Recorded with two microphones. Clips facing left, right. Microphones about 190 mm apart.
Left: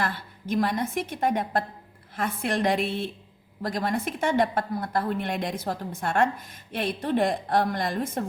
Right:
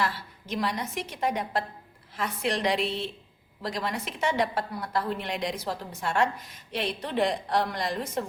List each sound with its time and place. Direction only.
0.0 s a woman's voice: 50° left (ahead or behind)